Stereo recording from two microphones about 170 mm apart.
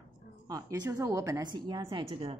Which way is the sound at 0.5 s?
20° right (ahead or behind).